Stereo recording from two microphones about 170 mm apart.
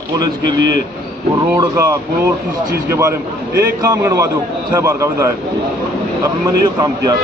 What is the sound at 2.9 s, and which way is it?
A man's voice, 15° right (ahead or behind).